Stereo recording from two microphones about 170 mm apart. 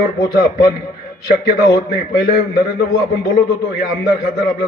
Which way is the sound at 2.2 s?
65° left (ahead or behind).